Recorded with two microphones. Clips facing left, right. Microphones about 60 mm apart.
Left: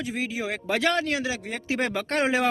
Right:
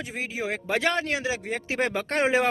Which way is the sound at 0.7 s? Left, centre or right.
Right.